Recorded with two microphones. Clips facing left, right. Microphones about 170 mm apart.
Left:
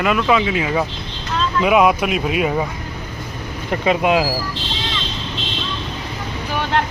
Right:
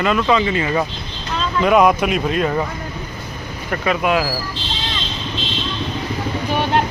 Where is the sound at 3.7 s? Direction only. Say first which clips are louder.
Left 2 dB; 25° left (ahead or behind).